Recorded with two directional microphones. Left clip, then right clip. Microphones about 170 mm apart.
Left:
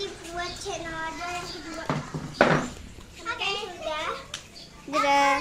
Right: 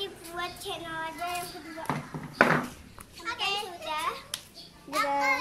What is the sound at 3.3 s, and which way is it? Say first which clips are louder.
Children playing: left 2 dB; 15° right (ahead or behind).